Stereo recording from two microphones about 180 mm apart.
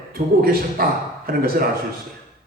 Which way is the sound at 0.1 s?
55° right (ahead or behind).